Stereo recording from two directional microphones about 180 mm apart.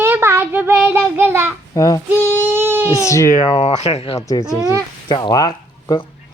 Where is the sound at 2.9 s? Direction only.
15° left (ahead or behind).